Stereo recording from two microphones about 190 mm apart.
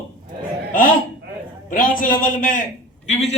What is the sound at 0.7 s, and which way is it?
A man's voice, 45° left (ahead or behind).